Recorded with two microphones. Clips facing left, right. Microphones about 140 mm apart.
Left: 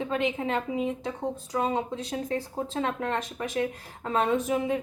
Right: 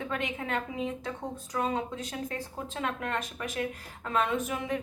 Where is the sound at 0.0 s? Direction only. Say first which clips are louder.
Left 6 dB; 25° left (ahead or behind).